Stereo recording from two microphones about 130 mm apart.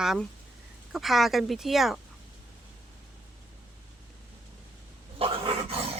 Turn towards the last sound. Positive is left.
turn(degrees=-45)  # may be behind; listen again after turning